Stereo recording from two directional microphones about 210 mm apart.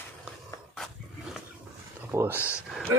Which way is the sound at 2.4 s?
10° left (ahead or behind).